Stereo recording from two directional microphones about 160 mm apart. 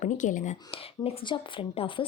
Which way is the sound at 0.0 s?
55° left (ahead or behind).